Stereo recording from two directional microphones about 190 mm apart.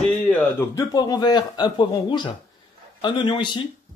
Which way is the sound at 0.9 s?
20° left (ahead or behind).